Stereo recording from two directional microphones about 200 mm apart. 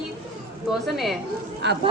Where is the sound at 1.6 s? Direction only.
60° right (ahead or behind).